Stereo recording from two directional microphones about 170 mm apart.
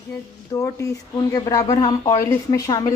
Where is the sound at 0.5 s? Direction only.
20° left (ahead or behind).